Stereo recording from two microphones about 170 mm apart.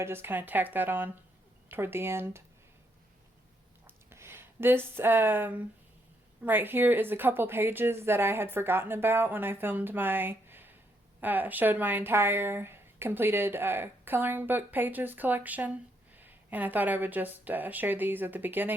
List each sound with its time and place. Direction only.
0.0 s speech: 15° right (ahead or behind)
3.8 s a sound: 15° right (ahead or behind)
6.4 s speech: 10° right (ahead or behind)